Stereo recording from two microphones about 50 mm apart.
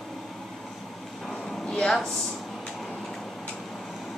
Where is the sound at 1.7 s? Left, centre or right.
Centre.